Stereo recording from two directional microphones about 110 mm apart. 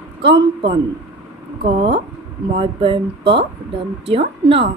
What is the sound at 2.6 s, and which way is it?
Speech, 55° right (ahead or behind).